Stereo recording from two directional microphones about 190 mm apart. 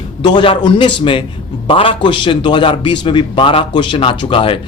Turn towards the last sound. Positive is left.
turn(degrees=25)  # may be behind; listen again after turning